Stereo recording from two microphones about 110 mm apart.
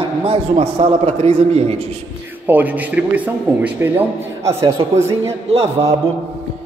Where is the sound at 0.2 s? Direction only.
65° right (ahead or behind).